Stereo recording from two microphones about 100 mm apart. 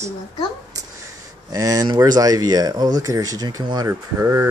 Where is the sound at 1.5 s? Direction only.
35° right (ahead or behind).